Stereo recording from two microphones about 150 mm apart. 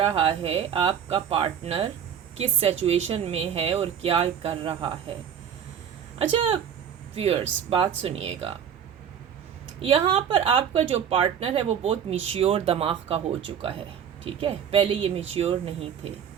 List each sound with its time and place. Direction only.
0.0 s a woman's voice: 40° right (ahead or behind)
6.1 s a woman's voice: 40° right (ahead or behind)
9.8 s a woman's voice: 40° right (ahead or behind)